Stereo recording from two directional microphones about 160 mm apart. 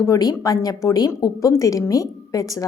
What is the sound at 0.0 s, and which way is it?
Speech, 20° left (ahead or behind).